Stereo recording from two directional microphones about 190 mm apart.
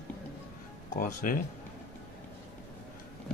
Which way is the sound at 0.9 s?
45° left (ahead or behind).